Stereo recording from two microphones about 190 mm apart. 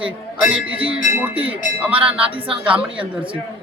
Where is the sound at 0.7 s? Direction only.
30° right (ahead or behind).